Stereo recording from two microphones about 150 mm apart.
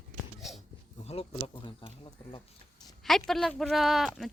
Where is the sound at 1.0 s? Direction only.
40° left (ahead or behind).